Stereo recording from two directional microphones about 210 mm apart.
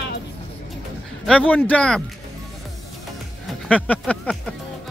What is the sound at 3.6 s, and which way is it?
Speech, 5° left (ahead or behind).